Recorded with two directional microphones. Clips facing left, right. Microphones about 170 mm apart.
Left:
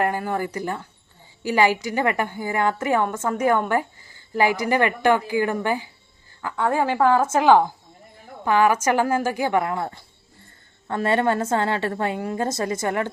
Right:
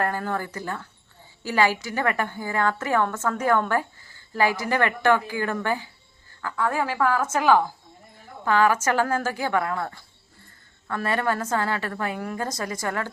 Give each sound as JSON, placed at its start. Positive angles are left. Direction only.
{"t": 0.0, "sound": "a woman's voice", "side_deg": 15}